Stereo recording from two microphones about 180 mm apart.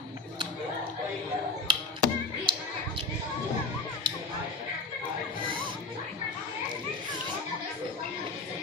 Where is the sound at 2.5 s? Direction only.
25° right (ahead or behind).